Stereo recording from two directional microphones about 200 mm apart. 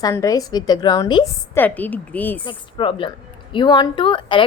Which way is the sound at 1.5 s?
10° left (ahead or behind).